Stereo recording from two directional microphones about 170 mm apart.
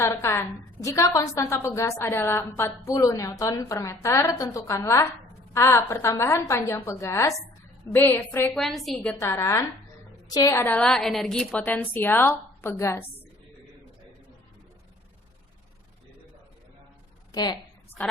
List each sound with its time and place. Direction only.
0.0 s a woman's voice: 15° left (ahead or behind); by 9.1 s centre (ahead or behind)
9.1 s a woman's voice: 15° left (ahead or behind)
17.3 s a woman's voice: 25° left (ahead or behind)
18.0 s a woman's voice: 10° left (ahead or behind)